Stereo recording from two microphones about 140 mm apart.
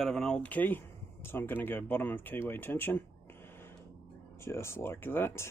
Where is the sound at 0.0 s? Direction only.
5° left (ahead or behind).